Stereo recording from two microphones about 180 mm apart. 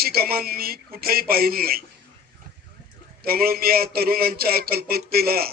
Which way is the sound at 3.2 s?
55° right (ahead or behind).